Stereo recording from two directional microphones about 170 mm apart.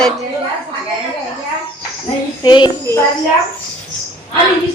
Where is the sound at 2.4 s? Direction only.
25° left (ahead or behind).